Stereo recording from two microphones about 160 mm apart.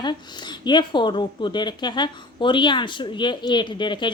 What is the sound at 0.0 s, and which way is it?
Speech, 30° left (ahead or behind).